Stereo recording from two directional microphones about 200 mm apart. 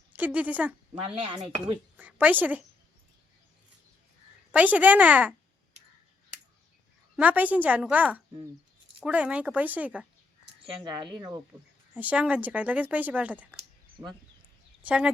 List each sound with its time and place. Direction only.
0.1 s a woman's voice: 10° right (ahead or behind)
1.0 s speech: 25° right (ahead or behind)
2.0 s a woman's voice: 10° right (ahead or behind)
4.5 s speech: 10° right (ahead or behind)
7.2 s speech: 10° right (ahead or behind)
10.6 s speech: 25° right (ahead or behind)
11.9 s speech: 5° right (ahead or behind)
13.9 s speech: 20° right (ahead or behind)
14.8 s speech: 5° right (ahead or behind)